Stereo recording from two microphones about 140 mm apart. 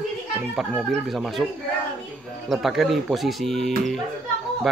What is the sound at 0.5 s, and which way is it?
Speech, centre (ahead or behind).